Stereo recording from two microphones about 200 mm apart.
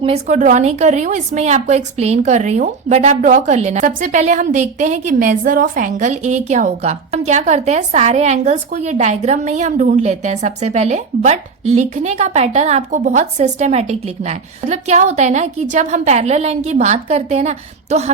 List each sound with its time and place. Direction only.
0.0 s a woman's voice: 35° right (ahead or behind)